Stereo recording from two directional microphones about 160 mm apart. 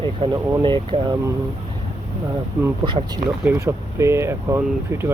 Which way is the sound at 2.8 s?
30° right (ahead or behind).